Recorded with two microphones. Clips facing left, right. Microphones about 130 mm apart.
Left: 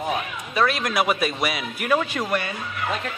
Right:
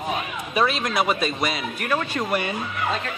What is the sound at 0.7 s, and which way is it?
Speech, centre (ahead or behind).